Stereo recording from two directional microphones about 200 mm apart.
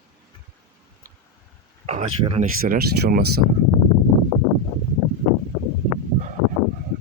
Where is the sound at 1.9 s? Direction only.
30° right (ahead or behind).